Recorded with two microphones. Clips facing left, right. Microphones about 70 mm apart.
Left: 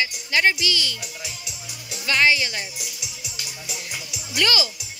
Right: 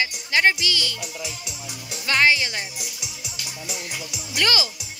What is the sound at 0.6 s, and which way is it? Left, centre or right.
Speech, right.